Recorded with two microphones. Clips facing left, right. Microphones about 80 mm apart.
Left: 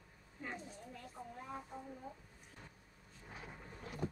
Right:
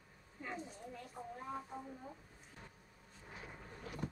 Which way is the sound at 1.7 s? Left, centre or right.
Right.